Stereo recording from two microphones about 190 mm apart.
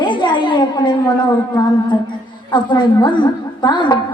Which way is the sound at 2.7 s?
25° left (ahead or behind).